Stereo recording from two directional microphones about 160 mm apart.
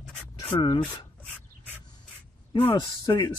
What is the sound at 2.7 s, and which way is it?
Speech, 20° left (ahead or behind).